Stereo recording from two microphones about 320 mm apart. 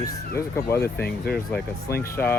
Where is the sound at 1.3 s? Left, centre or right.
Left.